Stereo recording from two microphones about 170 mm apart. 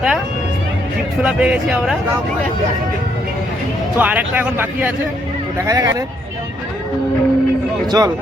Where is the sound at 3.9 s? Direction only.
10° right (ahead or behind).